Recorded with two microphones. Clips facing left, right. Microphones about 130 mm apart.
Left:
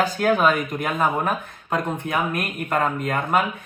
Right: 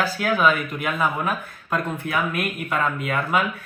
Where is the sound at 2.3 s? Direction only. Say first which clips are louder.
Left 1 dB; 45° left (ahead or behind).